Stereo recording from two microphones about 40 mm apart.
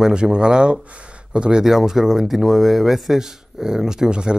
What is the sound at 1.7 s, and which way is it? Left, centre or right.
Speech, centre.